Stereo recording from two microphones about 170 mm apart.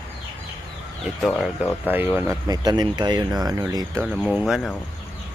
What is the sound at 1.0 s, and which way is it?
Speech, centre (ahead or behind).